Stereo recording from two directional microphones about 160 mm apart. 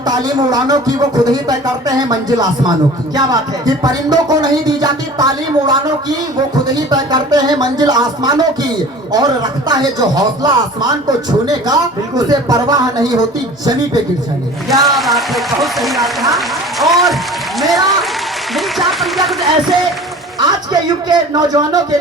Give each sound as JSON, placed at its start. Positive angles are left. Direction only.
{"t": 0.0, "sound": "speech", "side_deg": -25}
{"t": 6.7, "sound": "speech", "side_deg": -25}
{"t": 14.7, "sound": "speech", "side_deg": 0}
{"t": 21.1, "sound": "speech", "side_deg": -25}